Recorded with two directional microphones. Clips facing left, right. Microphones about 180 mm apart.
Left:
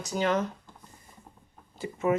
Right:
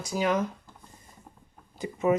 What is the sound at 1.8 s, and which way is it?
Speech, 20° right (ahead or behind).